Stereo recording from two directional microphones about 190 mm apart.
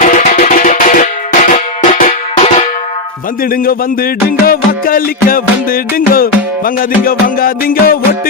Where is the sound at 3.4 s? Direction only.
50° left (ahead or behind).